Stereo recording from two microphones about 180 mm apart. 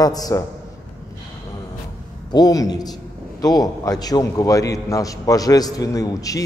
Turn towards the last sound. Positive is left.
turn(degrees=20)  # may be behind; listen again after turning